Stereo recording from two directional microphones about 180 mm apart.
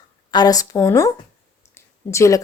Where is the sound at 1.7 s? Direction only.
15° left (ahead or behind).